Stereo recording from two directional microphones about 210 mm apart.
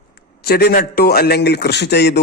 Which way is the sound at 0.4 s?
50° left (ahead or behind).